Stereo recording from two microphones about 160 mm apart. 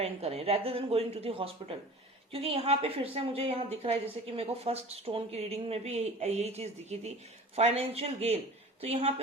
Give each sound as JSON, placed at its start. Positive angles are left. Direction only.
{"t": 0.0, "sound": "speech", "side_deg": -40}